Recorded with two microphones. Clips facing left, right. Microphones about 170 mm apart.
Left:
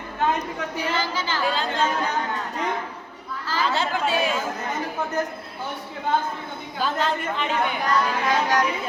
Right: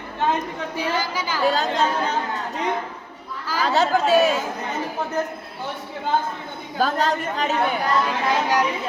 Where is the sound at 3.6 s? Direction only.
40° right (ahead or behind).